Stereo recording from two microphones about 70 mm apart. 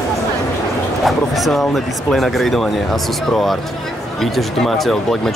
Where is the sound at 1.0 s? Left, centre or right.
Centre.